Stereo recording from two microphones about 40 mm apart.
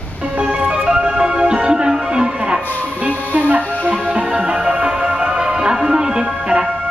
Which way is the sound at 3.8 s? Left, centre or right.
Right.